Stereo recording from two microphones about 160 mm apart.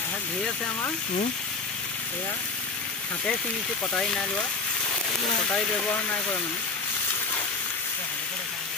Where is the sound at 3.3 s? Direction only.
5° left (ahead or behind).